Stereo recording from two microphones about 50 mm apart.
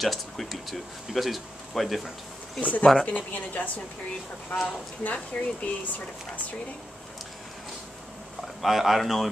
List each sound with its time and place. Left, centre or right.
0.0 s speech: centre
2.6 s a woman's voice: left
8.6 s speech: centre